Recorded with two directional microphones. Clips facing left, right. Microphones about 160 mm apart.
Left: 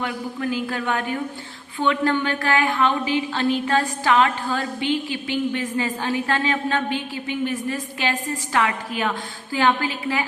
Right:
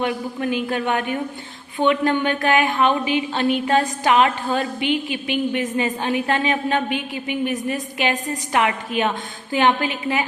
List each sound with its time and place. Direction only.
0.0 s a woman's voice: 20° right (ahead or behind)